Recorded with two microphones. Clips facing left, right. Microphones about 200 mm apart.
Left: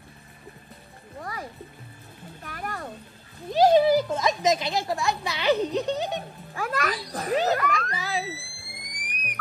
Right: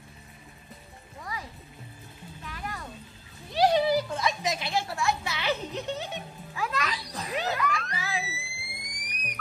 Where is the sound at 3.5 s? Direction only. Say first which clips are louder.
Left 5 dB; 45° left (ahead or behind).